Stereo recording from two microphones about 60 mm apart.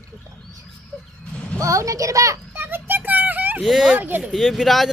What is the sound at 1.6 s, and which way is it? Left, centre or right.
Speech, right.